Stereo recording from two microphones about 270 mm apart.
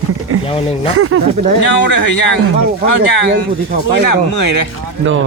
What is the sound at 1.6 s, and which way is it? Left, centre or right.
Speech, left.